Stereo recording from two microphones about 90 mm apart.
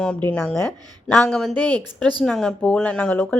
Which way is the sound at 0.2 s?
20° left (ahead or behind).